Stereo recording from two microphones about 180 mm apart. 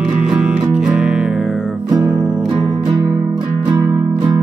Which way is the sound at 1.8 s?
20° right (ahead or behind).